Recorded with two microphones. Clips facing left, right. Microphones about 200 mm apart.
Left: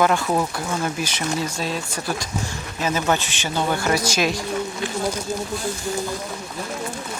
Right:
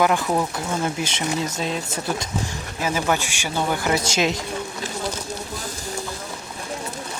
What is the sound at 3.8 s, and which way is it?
Speech, 20° right (ahead or behind).